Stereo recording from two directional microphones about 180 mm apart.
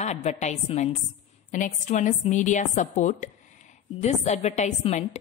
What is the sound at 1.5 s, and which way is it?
A woman's voice, 45° left (ahead or behind).